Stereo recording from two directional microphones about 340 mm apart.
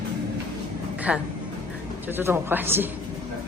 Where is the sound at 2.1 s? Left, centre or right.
Centre.